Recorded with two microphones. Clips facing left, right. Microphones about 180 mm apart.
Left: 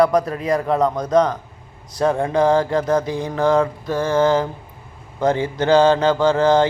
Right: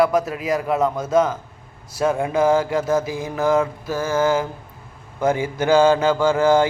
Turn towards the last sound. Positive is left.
turn(degrees=-10)  # may be behind; listen again after turning